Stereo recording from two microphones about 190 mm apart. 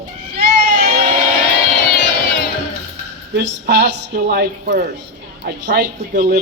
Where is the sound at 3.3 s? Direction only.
60° right (ahead or behind).